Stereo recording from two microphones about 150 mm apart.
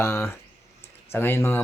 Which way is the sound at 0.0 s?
15° left (ahead or behind).